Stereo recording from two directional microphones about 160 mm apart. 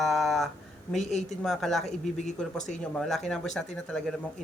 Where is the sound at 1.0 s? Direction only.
45° left (ahead or behind).